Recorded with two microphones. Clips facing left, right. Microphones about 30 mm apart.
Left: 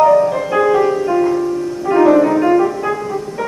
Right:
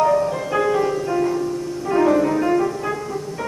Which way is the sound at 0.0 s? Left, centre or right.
Centre.